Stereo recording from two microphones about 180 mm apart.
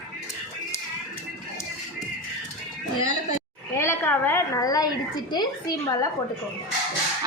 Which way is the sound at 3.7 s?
15° left (ahead or behind).